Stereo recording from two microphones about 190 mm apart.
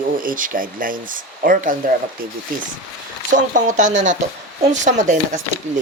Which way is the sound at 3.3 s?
40° right (ahead or behind).